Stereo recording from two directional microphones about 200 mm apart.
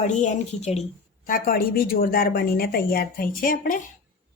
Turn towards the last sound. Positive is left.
turn(degrees=45)  # may be behind; listen again after turning